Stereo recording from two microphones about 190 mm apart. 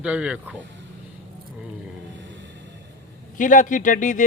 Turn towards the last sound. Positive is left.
turn(degrees=45)  # may be behind; listen again after turning